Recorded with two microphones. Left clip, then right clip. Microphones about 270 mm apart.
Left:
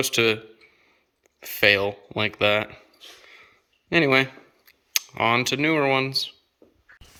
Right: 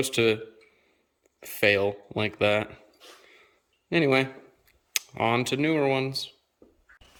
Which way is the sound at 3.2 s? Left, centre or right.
Centre.